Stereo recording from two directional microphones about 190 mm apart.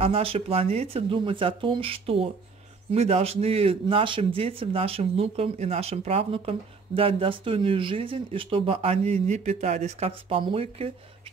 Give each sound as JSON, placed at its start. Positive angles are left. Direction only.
{"t": 0.0, "sound": "speech", "side_deg": -30}